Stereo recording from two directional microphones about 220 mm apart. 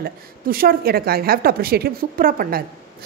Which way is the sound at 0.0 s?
40° right (ahead or behind).